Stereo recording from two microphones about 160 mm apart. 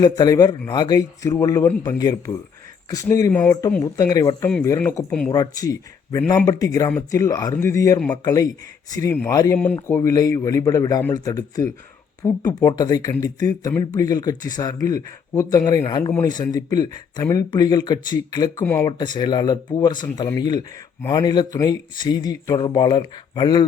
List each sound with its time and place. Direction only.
0.0 s speech: 25° left (ahead or behind)
5.3 s speech: 25° left (ahead or behind)
18.6 s speech: 10° left (ahead or behind)
18.9 s speech: 25° left (ahead or behind)